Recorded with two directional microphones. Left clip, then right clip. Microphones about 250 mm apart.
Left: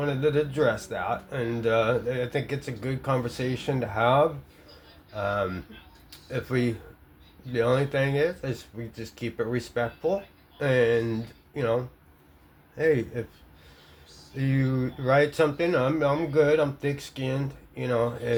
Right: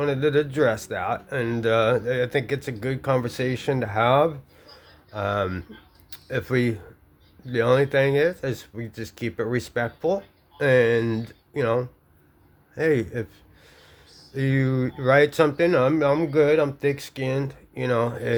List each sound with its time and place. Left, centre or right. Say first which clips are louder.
0.0 s a man's voice: right 3 dB; right
14.3 s speech: right 4 dB; right